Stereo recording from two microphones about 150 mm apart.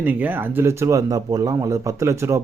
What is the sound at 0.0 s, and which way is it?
A man's voice, 10° right (ahead or behind).